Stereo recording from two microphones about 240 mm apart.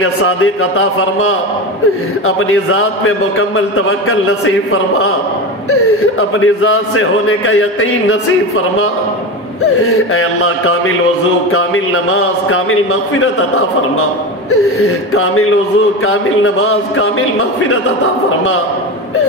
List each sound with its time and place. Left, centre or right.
0.0 s speech: left
5.7 s speech: left
9.8 s speech: left
16.1 s speech: left